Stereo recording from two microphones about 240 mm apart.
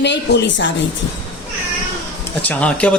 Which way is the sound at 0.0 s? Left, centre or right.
Left.